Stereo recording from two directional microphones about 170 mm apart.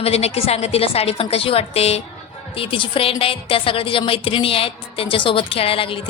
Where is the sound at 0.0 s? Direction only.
40° left (ahead or behind).